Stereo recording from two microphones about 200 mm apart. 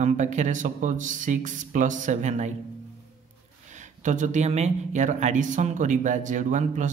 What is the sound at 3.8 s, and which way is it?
Speech, 40° right (ahead or behind).